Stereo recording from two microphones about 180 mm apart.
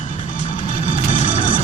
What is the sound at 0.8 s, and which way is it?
Music, 45° left (ahead or behind).